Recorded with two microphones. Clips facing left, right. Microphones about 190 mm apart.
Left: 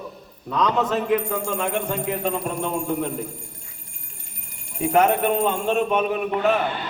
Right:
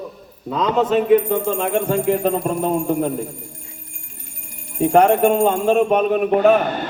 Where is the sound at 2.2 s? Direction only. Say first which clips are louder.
Right 6 dB; 40° right (ahead or behind).